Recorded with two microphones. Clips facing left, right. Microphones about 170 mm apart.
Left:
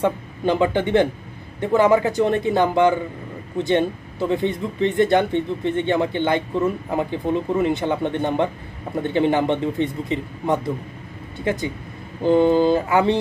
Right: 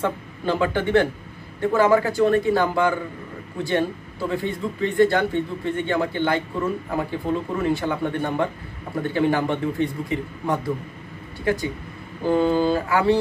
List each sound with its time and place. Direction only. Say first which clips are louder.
0.0 s speech: left 4 dB; 20° left (ahead or behind)